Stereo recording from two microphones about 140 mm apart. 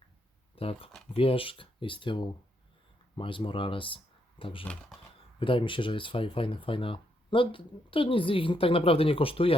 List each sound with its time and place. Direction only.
0.5 s speech: 40° left (ahead or behind)
4.6 s speech: 5° left (ahead or behind)
5.4 s speech: 35° left (ahead or behind)